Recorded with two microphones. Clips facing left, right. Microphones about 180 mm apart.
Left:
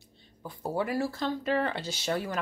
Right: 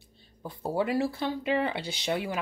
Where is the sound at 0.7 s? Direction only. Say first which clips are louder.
Right 3 dB; 20° right (ahead or behind).